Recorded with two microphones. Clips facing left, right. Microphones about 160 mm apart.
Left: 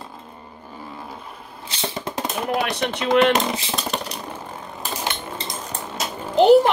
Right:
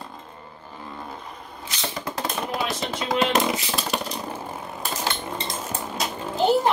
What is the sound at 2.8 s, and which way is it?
Speech, 70° left (ahead or behind).